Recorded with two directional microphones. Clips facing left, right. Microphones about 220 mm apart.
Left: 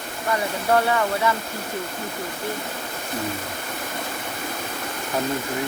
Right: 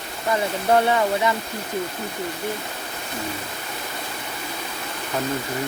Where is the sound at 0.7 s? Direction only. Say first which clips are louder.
Right 2 dB; 20° right (ahead or behind).